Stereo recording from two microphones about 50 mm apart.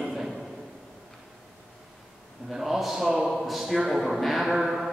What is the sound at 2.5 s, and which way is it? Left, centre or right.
A man's voice, centre.